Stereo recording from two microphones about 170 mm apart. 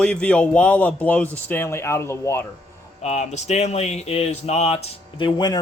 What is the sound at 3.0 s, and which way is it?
Speech, 40° left (ahead or behind).